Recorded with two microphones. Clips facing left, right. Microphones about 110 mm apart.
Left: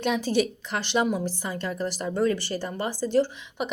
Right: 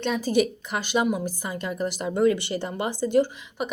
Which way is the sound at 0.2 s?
10° right (ahead or behind).